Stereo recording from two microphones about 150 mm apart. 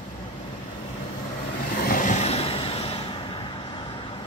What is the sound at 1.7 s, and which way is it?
Vehicle, 65° left (ahead or behind).